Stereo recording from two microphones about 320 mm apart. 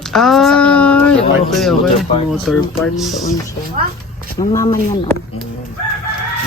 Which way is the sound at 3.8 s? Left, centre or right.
Right.